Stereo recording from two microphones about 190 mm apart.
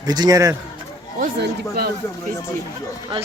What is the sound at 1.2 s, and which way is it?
Speech, 55° right (ahead or behind).